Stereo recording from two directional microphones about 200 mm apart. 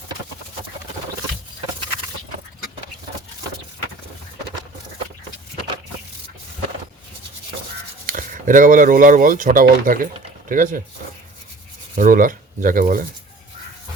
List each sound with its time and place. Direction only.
8.0 s speech: 40° right (ahead or behind)
11.9 s speech: 45° right (ahead or behind)